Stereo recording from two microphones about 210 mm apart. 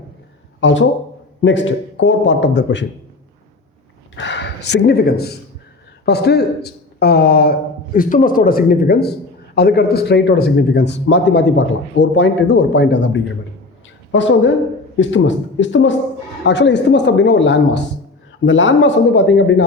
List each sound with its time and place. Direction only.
0.6 s speech: 60° left (ahead or behind)
4.1 s speech: 60° left (ahead or behind)